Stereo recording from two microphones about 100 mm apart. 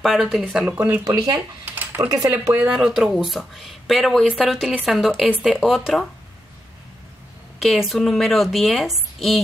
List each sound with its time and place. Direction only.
0.0 s speech: centre (ahead or behind)
0.7 s speech: 20° right (ahead or behind)
1.0 s speech: 40° right (ahead or behind)
2.5 s speech: 10° right (ahead or behind)
7.5 s speech: centre (ahead or behind)